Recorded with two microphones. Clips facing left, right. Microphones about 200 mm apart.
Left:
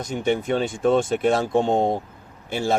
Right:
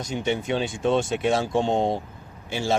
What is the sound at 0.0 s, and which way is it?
Speech, 55° left (ahead or behind).